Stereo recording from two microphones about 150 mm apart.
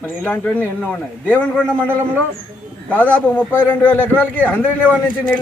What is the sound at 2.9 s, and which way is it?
Speech, 10° left (ahead or behind).